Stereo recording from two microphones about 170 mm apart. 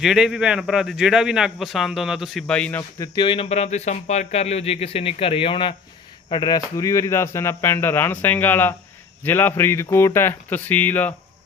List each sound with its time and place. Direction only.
0.0 s a man's voice: centre (ahead or behind)
3.0 s speech: 30° left (ahead or behind); by 11.1 s 10° left (ahead or behind)